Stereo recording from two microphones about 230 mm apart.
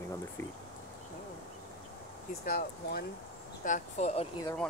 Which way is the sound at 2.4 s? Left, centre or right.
Left.